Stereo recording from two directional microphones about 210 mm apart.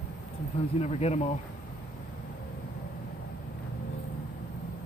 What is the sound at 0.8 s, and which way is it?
Speech, 30° left (ahead or behind).